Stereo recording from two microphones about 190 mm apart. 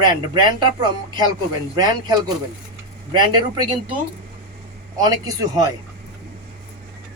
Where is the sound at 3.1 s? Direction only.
25° right (ahead or behind).